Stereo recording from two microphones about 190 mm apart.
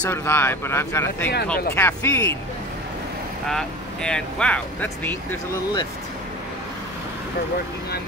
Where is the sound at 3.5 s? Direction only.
5° left (ahead or behind).